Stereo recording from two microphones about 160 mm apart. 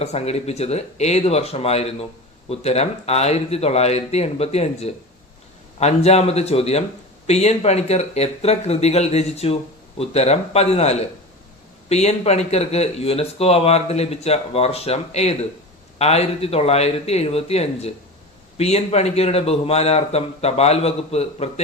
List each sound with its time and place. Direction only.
0.0 s speech: 40° left (ahead or behind)